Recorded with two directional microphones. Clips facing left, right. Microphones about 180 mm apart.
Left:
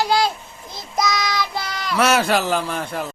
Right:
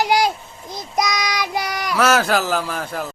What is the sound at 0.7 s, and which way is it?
Child singing, 15° right (ahead or behind).